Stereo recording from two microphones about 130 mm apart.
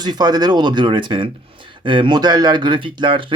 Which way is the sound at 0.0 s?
30° right (ahead or behind).